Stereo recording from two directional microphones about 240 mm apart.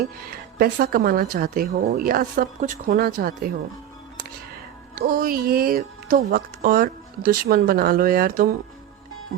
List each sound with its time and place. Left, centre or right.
0.0 s speech: right
4.9 s speech: right